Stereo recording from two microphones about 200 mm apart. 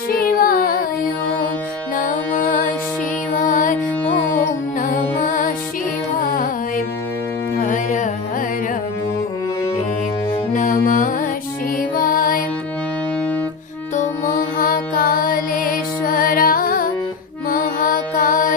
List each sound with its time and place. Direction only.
0.1 s music: 45° left (ahead or behind)
2.0 s music: 40° left (ahead or behind)
7.6 s music: 40° left (ahead or behind)
10.5 s music: 40° left (ahead or behind)
13.9 s music: 40° left (ahead or behind)
17.5 s mantra: 45° left (ahead or behind)